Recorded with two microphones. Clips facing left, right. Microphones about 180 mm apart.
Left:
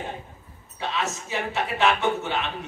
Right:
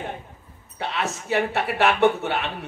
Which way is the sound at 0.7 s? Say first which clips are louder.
Right 1 dB; 60° right (ahead or behind).